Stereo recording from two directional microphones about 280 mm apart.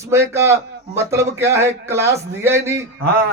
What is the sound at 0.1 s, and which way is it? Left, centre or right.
A man's voice, centre.